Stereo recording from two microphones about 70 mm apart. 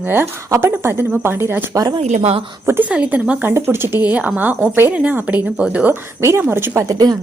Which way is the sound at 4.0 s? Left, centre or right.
Right.